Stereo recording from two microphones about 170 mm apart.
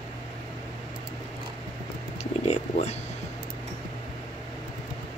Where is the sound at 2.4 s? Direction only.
40° left (ahead or behind).